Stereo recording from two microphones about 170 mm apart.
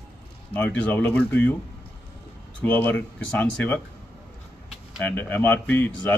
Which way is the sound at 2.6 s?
10° left (ahead or behind).